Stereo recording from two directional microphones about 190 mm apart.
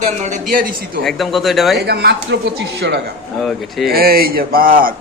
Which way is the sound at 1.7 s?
60° right (ahead or behind).